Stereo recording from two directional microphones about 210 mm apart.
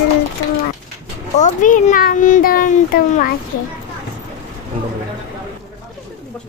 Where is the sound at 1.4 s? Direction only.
40° left (ahead or behind).